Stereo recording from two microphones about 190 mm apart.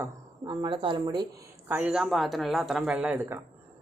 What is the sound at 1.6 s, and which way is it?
Speech, 5° right (ahead or behind).